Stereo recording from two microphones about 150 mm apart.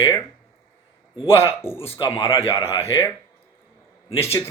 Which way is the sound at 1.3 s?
15° left (ahead or behind).